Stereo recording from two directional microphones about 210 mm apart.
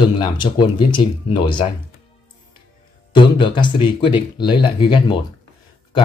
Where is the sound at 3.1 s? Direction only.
25° left (ahead or behind).